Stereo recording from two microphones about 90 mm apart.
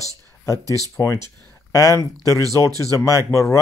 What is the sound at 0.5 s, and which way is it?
Speech, 40° right (ahead or behind).